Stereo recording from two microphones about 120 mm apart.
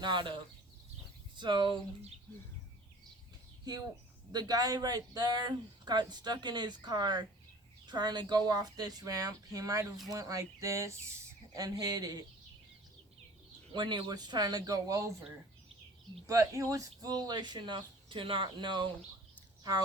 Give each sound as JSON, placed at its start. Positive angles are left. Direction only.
{"t": 0.0, "sound": "speech", "side_deg": -40}
{"t": 3.6, "sound": "speech", "side_deg": -35}
{"t": 13.7, "sound": "speech", "side_deg": -40}
{"t": 16.2, "sound": "speech", "side_deg": -25}